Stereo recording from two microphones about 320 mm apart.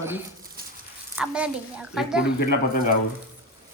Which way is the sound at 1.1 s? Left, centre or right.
Centre.